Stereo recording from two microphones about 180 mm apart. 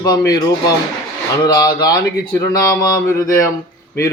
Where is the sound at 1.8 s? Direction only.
20° left (ahead or behind).